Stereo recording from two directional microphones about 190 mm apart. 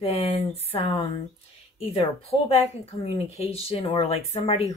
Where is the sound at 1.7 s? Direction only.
30° left (ahead or behind).